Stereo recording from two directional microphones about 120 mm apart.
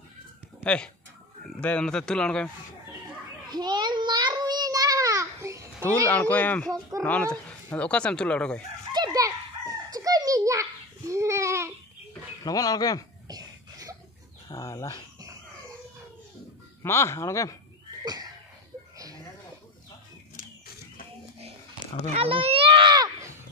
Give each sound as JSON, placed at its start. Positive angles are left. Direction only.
{"t": 1.6, "sound": "speech", "side_deg": 10}
{"t": 3.4, "sound": "a sound", "side_deg": -35}
{"t": 5.8, "sound": "speech", "side_deg": 15}
{"t": 8.9, "sound": "chicken", "side_deg": -30}
{"t": 12.4, "sound": "speech", "side_deg": 30}
{"t": 13.3, "sound": "cough", "side_deg": -30}
{"t": 14.5, "sound": "speech", "side_deg": 25}
{"t": 16.8, "sound": "speech", "side_deg": 20}
{"t": 18.0, "sound": "a sound", "side_deg": -35}
{"t": 22.1, "sound": "a child's voice", "side_deg": -50}